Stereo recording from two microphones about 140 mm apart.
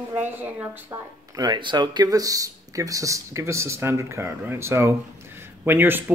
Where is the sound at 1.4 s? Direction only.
35° right (ahead or behind).